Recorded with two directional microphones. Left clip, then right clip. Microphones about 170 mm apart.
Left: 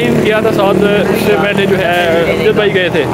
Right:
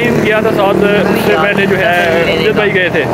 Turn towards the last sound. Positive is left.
turn(degrees=25)  # may be behind; listen again after turning